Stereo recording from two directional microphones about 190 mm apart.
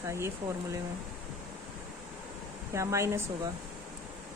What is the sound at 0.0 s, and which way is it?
Speech, 15° right (ahead or behind).